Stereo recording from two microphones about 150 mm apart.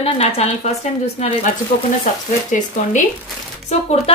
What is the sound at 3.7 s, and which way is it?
Speech, 45° left (ahead or behind).